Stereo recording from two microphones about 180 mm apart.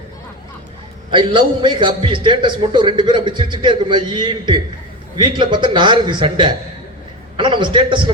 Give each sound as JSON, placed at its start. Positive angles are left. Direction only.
{"t": 1.1, "sound": "a man's voice", "side_deg": -25}